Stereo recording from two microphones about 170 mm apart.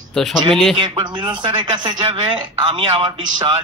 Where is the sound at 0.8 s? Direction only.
25° right (ahead or behind).